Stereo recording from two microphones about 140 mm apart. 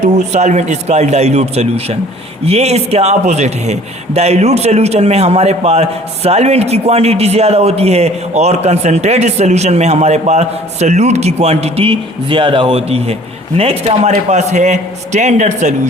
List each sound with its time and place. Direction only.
0.0 s a man's voice: 55° right (ahead or behind)